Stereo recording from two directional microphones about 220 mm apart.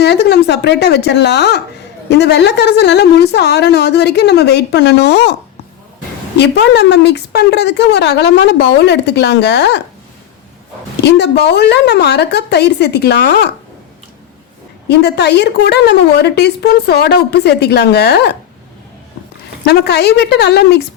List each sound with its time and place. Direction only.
0.0 s a woman's voice: 50° left (ahead or behind)
11.0 s a woman's voice: 50° left (ahead or behind)
14.8 s a woman's voice: 50° left (ahead or behind)
19.6 s a woman's voice: 50° left (ahead or behind)